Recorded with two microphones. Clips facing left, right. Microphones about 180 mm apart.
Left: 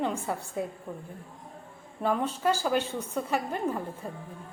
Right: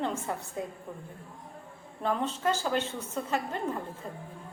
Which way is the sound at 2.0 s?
10° left (ahead or behind).